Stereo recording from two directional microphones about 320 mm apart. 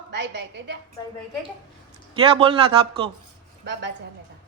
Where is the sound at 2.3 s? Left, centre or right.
Centre.